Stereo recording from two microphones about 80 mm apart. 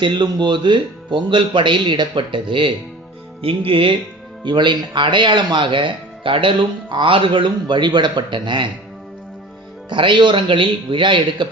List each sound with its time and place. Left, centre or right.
0.0 s a man's voice: right
4.4 s speech: right
9.9 s a man's voice: right